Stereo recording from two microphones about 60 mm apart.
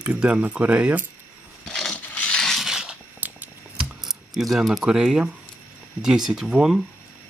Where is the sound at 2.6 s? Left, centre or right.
Centre.